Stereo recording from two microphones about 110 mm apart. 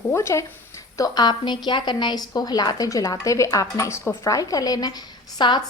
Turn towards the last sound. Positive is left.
turn(degrees=40)  # may be behind; listen again after turning